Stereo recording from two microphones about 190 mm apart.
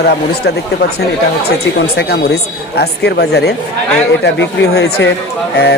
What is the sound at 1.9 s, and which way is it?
Speech, 65° left (ahead or behind).